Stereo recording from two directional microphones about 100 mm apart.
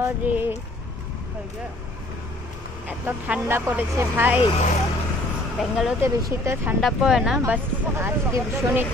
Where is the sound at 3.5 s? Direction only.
20° right (ahead or behind).